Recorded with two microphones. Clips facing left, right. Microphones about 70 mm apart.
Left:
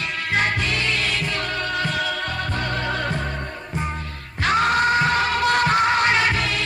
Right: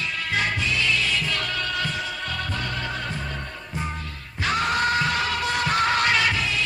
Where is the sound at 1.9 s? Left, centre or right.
Left.